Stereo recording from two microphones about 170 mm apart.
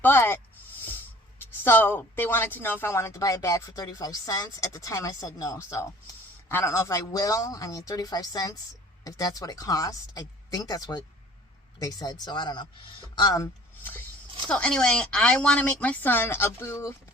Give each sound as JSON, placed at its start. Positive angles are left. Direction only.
{"t": 0.0, "sound": "speech", "side_deg": 15}
{"t": 1.4, "sound": "a man's voice", "side_deg": 10}